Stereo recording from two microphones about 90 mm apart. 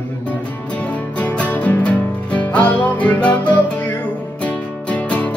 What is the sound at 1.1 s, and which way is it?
Music, 15° left (ahead or behind).